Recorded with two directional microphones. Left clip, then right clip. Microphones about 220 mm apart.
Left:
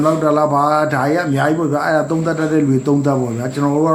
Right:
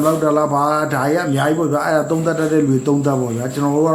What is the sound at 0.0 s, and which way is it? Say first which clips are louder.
A man's voice: left 1 dB; 5° left (ahead or behind).